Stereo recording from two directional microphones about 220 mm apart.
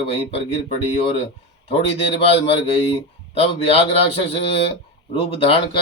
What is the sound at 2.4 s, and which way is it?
Speech, 25° left (ahead or behind).